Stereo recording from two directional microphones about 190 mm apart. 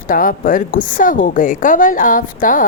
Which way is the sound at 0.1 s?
45° left (ahead or behind).